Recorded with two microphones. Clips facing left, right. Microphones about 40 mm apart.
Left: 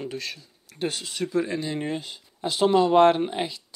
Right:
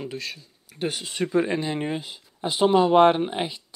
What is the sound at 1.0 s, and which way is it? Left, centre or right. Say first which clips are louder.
Speech: right 5 dB; right.